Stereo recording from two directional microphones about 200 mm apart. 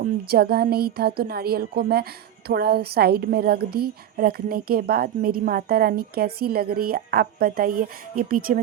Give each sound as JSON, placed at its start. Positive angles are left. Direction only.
{"t": 0.0, "sound": "a woman's voice", "side_deg": -50}